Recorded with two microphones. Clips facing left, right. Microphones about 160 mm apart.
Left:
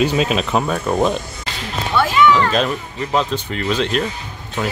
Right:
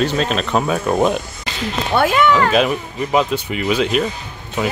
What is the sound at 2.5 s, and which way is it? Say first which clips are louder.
Speech: right 3 dB; 10° right (ahead or behind).